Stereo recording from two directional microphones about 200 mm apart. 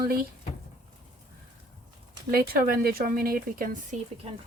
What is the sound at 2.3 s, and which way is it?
Speech, 50° right (ahead or behind).